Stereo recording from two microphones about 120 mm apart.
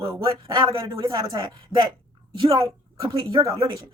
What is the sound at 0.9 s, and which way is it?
Speech, 40° right (ahead or behind).